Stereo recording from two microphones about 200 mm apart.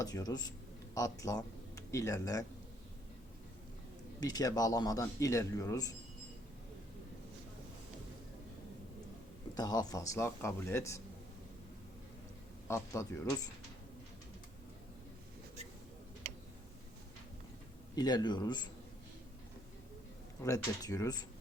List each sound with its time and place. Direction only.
0.0 s a man's voice: 20° left (ahead or behind)
4.2 s speech: 20° left (ahead or behind)
9.6 s speech: 20° left (ahead or behind)
12.6 s speech: 15° left (ahead or behind)
17.9 s a man's voice: 20° left (ahead or behind)
20.4 s speech: 15° left (ahead or behind)